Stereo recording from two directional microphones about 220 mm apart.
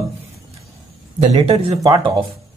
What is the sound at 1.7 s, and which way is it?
Speech, 25° right (ahead or behind).